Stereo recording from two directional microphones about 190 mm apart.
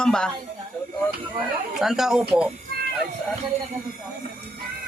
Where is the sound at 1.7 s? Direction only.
Centre (ahead or behind).